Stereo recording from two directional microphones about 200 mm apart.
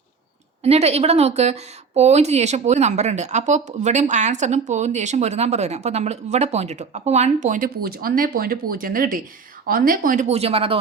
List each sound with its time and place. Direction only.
0.6 s speech: 30° right (ahead or behind)